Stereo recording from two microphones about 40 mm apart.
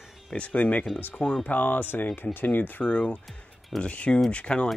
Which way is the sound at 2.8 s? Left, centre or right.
Left.